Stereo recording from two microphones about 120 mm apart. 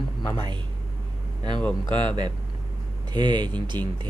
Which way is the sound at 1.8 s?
40° right (ahead or behind).